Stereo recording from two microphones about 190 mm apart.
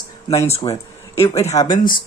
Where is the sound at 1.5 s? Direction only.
20° left (ahead or behind).